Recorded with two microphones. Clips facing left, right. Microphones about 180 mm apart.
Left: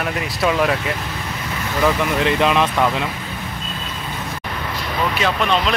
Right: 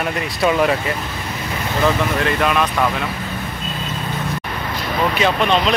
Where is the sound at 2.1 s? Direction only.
20° left (ahead or behind).